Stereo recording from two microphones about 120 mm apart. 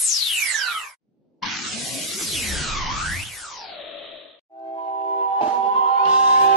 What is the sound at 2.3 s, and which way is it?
Music, centre (ahead or behind).